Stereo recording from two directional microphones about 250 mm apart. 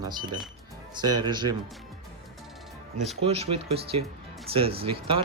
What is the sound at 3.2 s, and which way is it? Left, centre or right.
A man's voice, right.